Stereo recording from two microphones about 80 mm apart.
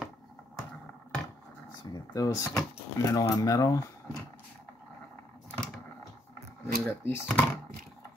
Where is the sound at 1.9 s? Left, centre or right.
Left.